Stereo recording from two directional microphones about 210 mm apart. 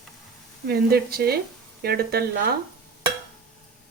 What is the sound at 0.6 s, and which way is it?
Speech, 50° right (ahead or behind).